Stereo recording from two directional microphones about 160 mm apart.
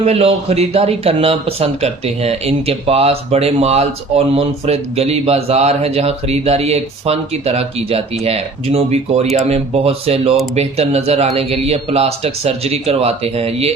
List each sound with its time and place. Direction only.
0.0 s speech: 40° right (ahead or behind)